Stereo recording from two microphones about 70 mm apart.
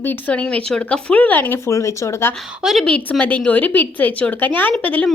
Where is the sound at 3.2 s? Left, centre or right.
Left.